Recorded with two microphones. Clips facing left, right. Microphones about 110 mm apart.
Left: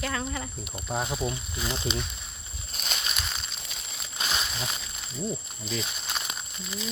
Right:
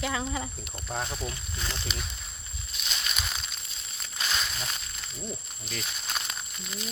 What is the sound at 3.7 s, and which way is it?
Crumpling, 90° left.